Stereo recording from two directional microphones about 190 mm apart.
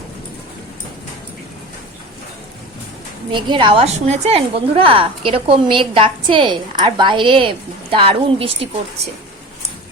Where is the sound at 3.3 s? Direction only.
25° right (ahead or behind).